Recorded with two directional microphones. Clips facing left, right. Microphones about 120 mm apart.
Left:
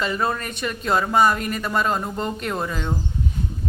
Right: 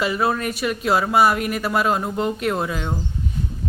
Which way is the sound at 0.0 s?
5° right (ahead or behind).